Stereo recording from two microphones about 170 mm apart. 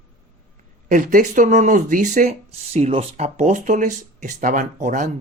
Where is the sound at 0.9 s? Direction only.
50° right (ahead or behind).